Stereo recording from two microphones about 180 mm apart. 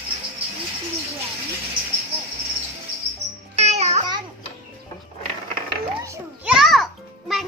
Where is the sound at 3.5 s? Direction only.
35° right (ahead or behind).